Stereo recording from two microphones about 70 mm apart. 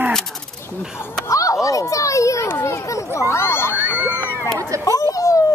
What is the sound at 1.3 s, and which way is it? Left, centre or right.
A child's voice, left.